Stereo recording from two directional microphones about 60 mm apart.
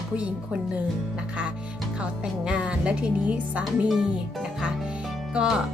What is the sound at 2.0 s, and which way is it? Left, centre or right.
Speech, centre.